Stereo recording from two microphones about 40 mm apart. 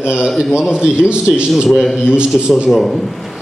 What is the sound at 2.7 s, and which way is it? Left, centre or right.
Speech, centre.